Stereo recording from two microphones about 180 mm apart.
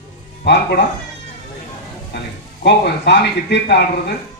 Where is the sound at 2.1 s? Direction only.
70° left (ahead or behind).